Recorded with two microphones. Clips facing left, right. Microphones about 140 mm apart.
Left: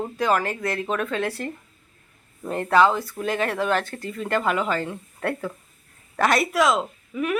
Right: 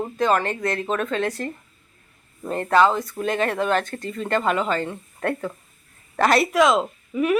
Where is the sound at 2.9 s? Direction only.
20° right (ahead or behind).